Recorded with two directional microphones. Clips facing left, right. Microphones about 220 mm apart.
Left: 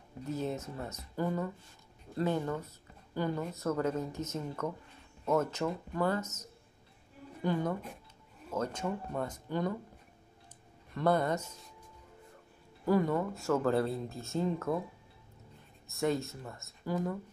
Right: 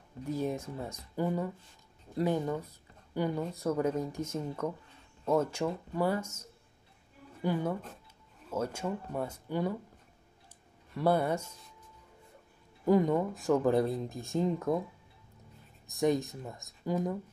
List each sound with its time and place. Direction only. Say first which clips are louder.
0.2 s speech: right 2 dB; 15° right (ahead or behind)
7.4 s speech: right 1 dB; 10° right (ahead or behind)
11.0 s speech: right 1 dB; 10° right (ahead or behind)
12.8 s speech: right 3 dB; 20° right (ahead or behind)
15.9 s speech: right 3 dB; 15° right (ahead or behind)